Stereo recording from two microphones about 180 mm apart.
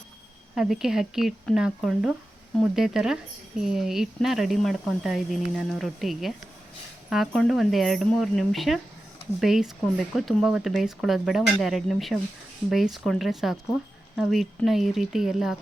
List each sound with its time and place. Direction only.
0.5 s speech: centre (ahead or behind)